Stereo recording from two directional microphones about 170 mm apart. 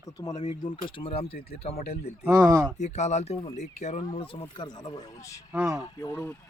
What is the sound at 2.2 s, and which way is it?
Speech, 15° right (ahead or behind).